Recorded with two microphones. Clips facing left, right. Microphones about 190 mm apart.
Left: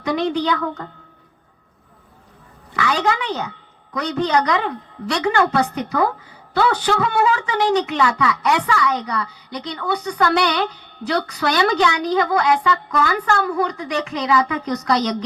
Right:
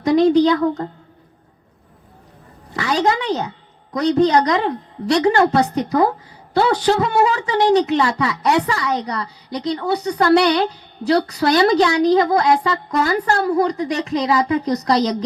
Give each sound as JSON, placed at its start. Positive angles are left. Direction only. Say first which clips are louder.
{"t": 0.0, "sound": "a woman's voice", "louder": "right 8 dB", "side_deg": -35}
{"t": 2.7, "sound": "a sound", "louder": "right 2 dB", "side_deg": -35}
{"t": 3.2, "sound": "speech", "louder": "right 4 dB", "side_deg": -35}